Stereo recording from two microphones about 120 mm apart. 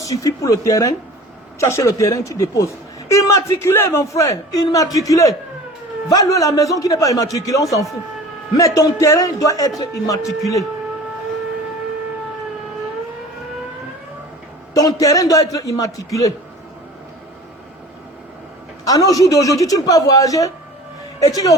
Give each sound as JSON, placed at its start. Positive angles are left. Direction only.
{"t": 0.0, "sound": "a man's voice", "side_deg": 30}
{"t": 14.7, "sound": "a man's voice", "side_deg": 30}
{"t": 18.9, "sound": "a man's voice", "side_deg": 30}